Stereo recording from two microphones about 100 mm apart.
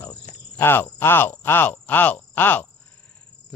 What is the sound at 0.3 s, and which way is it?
Cricket, 20° left (ahead or behind).